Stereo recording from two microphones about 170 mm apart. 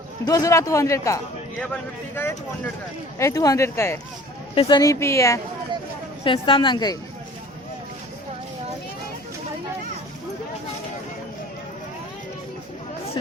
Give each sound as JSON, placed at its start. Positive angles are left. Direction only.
{"t": 0.3, "sound": "a man's voice", "side_deg": 20}
{"t": 6.2, "sound": "a man's voice", "side_deg": 30}